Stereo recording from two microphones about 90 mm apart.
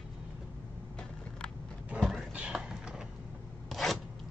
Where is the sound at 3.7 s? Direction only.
Centre (ahead or behind).